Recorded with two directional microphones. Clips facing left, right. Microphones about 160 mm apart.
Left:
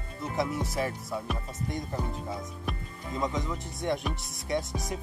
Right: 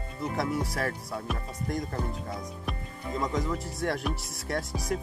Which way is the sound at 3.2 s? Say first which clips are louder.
Right 1 dB; centre (ahead or behind).